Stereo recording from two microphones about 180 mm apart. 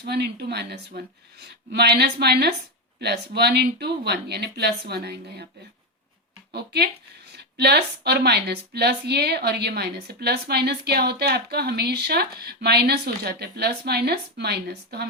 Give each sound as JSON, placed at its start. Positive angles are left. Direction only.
{"t": 0.0, "sound": "a woman's voice", "side_deg": -65}
{"t": 6.5, "sound": "a woman's voice", "side_deg": -65}